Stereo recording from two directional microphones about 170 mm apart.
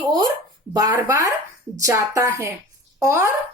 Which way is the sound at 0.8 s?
20° right (ahead or behind).